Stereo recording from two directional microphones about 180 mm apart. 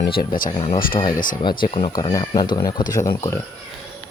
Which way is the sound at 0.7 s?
50° left (ahead or behind).